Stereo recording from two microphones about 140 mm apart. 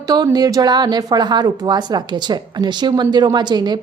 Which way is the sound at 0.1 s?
25° right (ahead or behind).